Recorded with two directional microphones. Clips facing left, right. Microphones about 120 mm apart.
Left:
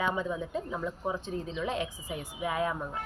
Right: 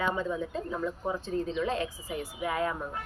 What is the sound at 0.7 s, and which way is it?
Speech, 5° left (ahead or behind).